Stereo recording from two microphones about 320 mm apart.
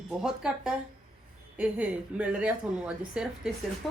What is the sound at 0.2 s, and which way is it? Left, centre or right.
A woman's voice, centre.